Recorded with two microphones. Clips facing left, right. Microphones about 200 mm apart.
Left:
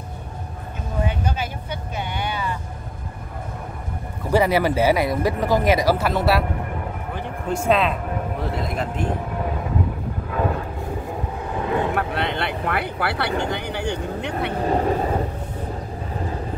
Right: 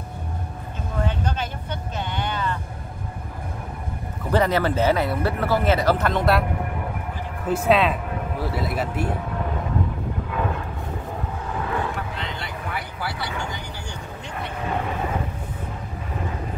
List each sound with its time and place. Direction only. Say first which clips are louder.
1.0 s vehicle: left 1 dB; 10° left (ahead or behind)
4.3 s a man's voice: left 2 dB; 10° left (ahead or behind)
7.4 s speech: right 1 dB; 5° right (ahead or behind)
11.9 s vehicle: left 7 dB; 65° left (ahead or behind)
13.4 s speech: left 8 dB; 60° left (ahead or behind)
14.5 s vehicle: left 6 dB; 35° left (ahead or behind)